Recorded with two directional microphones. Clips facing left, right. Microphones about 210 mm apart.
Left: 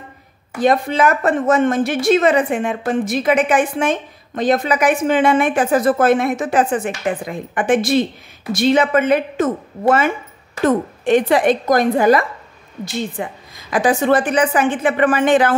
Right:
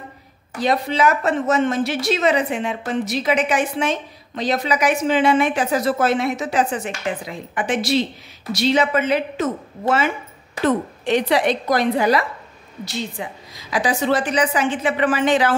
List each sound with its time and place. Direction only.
0.6 s a woman's voice: 50° left (ahead or behind)